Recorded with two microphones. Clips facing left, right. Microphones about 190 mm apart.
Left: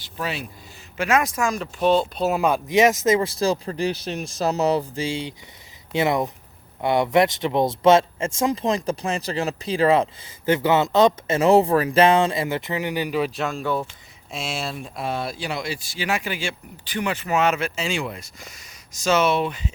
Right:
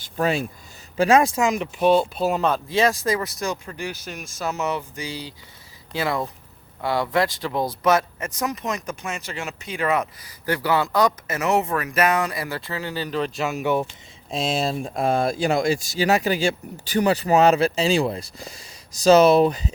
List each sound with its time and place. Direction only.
0.0 s a sound: 45° right (ahead or behind)
0.9 s speech: 30° right (ahead or behind); by 2.3 s 5° right (ahead or behind)
2.3 s speech: 10° left (ahead or behind)
13.6 s speech: 20° right (ahead or behind)
14.3 s speech: 35° right (ahead or behind)